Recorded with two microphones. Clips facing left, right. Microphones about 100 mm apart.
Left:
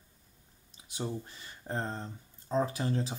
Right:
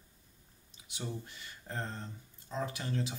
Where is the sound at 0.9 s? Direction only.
35° left (ahead or behind).